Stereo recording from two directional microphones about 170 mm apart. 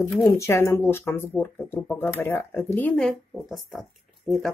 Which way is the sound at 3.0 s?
Centre (ahead or behind).